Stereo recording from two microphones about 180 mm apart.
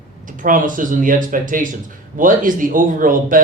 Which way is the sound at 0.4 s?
50° right (ahead or behind).